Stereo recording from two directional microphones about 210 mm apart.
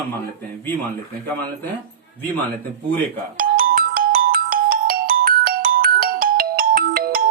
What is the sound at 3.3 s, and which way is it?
Ringtone, 45° right (ahead or behind).